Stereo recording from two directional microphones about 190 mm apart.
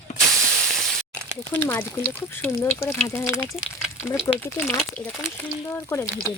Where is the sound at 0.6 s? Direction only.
Centre (ahead or behind).